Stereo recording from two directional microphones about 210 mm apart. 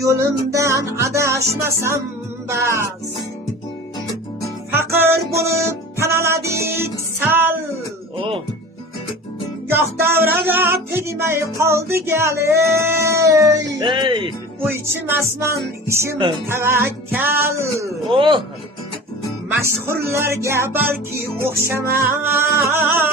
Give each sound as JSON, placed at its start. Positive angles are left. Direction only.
{"t": 0.0, "sound": "music", "side_deg": -15}
{"t": 4.9, "sound": "music", "side_deg": -10}
{"t": 9.6, "sound": "music", "side_deg": -10}
{"t": 13.7, "sound": "speech", "side_deg": -20}
{"t": 14.6, "sound": "music", "side_deg": -10}
{"t": 18.1, "sound": "speech", "side_deg": -25}
{"t": 19.5, "sound": "music", "side_deg": -10}